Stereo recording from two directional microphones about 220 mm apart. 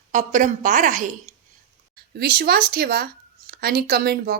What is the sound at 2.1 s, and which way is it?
Speech, 45° right (ahead or behind).